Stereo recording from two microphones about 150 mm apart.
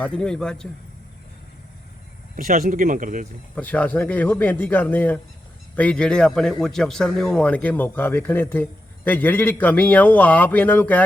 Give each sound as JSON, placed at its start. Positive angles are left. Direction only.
{"t": 0.0, "sound": "a man's voice", "side_deg": 5}
{"t": 2.3, "sound": "speech", "side_deg": -55}
{"t": 3.5, "sound": "a man's voice", "side_deg": 10}